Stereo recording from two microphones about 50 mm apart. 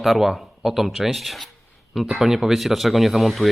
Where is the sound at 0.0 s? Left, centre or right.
Centre.